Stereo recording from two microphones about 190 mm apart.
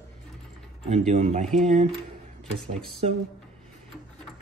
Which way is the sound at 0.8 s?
35° right (ahead or behind).